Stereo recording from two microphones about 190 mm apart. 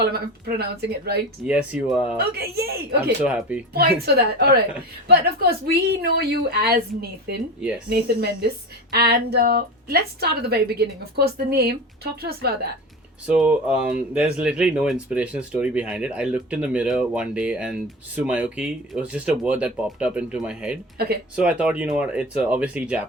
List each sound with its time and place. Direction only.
0.1 s a woman's voice: 55° right (ahead or behind)
1.5 s speech: 5° right (ahead or behind)
2.1 s a woman's voice: 55° right (ahead or behind)
3.2 s speech: 5° right (ahead or behind)
3.8 s a woman's voice: 55° right (ahead or behind)
13.2 s speech: 5° right (ahead or behind)